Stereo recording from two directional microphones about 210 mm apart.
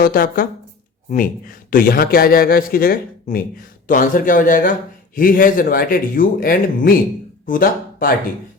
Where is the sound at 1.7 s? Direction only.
45° left (ahead or behind).